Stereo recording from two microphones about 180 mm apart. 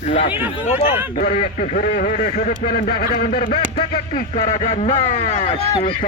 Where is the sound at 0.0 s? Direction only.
40° left (ahead or behind).